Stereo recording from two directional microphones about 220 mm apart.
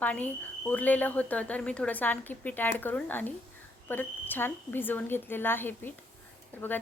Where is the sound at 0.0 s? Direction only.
5° left (ahead or behind).